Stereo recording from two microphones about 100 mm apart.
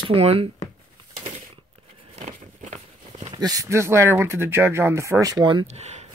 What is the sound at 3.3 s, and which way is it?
Speech, 40° right (ahead or behind).